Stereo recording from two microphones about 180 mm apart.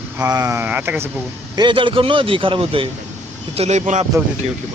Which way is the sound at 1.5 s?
25° right (ahead or behind).